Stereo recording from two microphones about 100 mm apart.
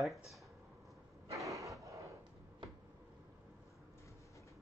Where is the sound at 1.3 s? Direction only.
35° right (ahead or behind).